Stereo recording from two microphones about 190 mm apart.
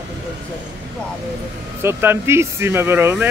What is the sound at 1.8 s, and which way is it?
Speech, 10° right (ahead or behind).